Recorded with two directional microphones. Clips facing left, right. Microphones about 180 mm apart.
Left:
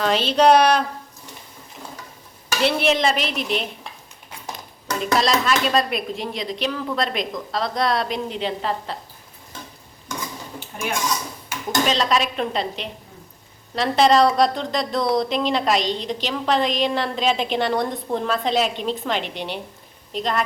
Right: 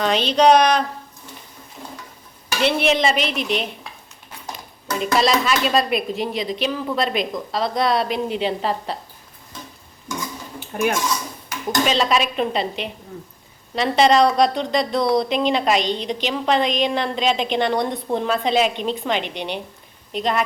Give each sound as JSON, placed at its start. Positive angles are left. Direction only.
{"t": 0.0, "sound": "speech", "side_deg": 5}
{"t": 2.6, "sound": "a woman's voice", "side_deg": 0}
{"t": 4.9, "sound": "a woman's voice", "side_deg": -5}
{"t": 8.4, "sound": "a woman's voice", "side_deg": -15}
{"t": 11.9, "sound": "a woman's voice", "side_deg": -5}